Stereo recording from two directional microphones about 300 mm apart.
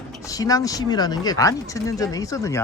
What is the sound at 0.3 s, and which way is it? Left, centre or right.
Speech, centre.